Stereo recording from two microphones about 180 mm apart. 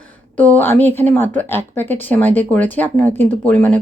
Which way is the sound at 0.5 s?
10° left (ahead or behind).